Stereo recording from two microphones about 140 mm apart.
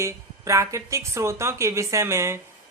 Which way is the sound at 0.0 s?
20° right (ahead or behind).